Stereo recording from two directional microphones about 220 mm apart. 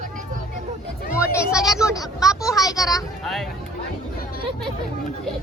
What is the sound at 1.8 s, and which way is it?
Vehicle, 15° left (ahead or behind).